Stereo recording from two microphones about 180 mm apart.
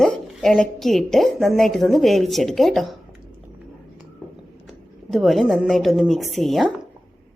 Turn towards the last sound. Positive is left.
turn(degrees=0)  # may be behind; listen again after turning